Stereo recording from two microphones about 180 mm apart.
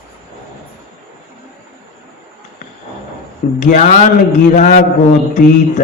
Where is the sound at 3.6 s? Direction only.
45° left (ahead or behind).